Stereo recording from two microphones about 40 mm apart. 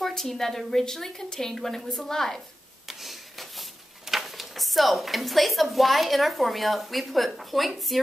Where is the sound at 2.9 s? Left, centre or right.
Centre.